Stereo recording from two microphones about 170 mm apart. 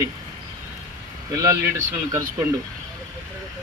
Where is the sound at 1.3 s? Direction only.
20° right (ahead or behind).